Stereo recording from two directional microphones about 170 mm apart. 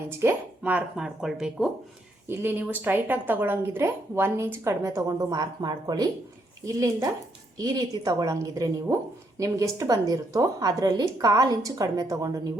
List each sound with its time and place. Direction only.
0.1 s a woman's voice: 15° right (ahead or behind)